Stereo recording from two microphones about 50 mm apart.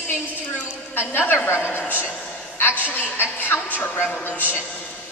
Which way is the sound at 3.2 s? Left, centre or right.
Left.